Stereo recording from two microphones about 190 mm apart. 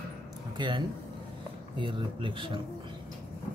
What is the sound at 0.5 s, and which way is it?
Speech, 25° right (ahead or behind).